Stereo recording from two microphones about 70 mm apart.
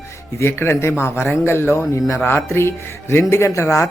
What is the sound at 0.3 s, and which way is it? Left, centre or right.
Speech, left.